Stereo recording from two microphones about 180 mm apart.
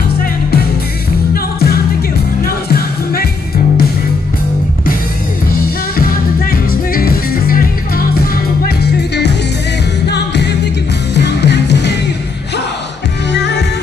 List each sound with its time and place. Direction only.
0.2 s music: 60° left (ahead or behind)
5.9 s music: 55° left (ahead or behind)
8.6 s music: 65° left (ahead or behind)
13.3 s music: 70° left (ahead or behind)